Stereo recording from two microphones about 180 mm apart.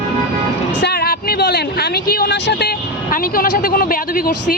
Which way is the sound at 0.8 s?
65° left (ahead or behind).